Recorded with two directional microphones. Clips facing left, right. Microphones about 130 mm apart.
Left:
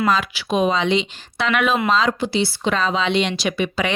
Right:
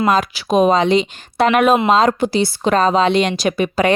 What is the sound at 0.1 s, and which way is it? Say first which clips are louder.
A woman's voice: right 5 dB; 40° right (ahead or behind).